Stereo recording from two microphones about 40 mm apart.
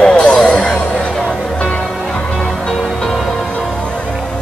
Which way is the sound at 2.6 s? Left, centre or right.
Centre.